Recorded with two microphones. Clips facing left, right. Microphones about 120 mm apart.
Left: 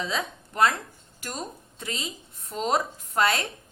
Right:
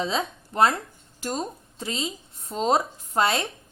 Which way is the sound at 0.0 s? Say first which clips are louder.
Right 3 dB; 30° right (ahead or behind).